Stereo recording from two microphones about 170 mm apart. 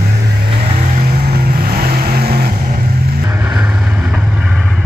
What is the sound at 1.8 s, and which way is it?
Vehicle, 65° right (ahead or behind).